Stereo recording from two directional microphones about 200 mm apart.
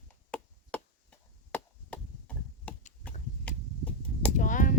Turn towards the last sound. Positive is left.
turn(degrees=40)  # may be behind; listen again after turning